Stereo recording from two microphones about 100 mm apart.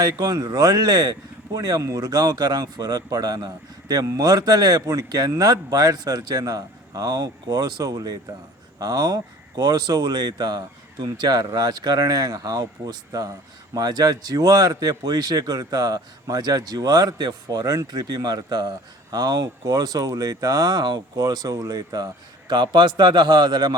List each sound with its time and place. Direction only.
0.0 s speech: 40° right (ahead or behind)